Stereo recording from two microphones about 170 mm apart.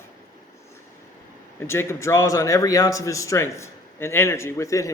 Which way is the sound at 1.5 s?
15° left (ahead or behind).